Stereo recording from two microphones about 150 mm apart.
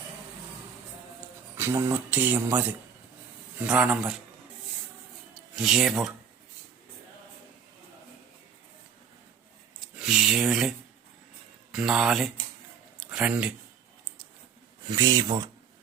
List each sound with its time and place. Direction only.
1.5 s speech: 15° right (ahead or behind)
5.5 s speech: 5° right (ahead or behind)
9.8 s speech: 5° right (ahead or behind)
13.0 s a sound: 5° right (ahead or behind)
14.8 s speech: 20° right (ahead or behind)